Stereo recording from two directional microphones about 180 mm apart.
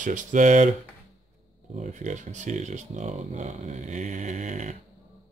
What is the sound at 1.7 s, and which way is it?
Speech, 40° right (ahead or behind).